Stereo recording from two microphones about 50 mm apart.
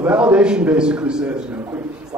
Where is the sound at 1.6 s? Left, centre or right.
Right.